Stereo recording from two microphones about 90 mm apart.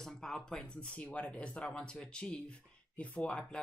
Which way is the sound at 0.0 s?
5° left (ahead or behind).